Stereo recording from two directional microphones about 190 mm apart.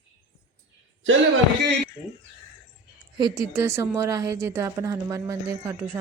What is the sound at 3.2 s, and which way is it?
A woman's voice, 20° right (ahead or behind).